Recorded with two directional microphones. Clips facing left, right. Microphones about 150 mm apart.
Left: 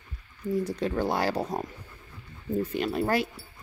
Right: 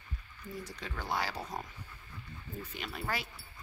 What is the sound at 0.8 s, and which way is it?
Speech, 50° left (ahead or behind).